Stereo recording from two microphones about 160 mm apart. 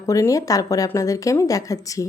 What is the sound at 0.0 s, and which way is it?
Speech, 20° left (ahead or behind).